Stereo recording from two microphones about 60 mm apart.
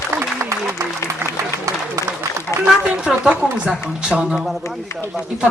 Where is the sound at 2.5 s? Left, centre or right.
Left.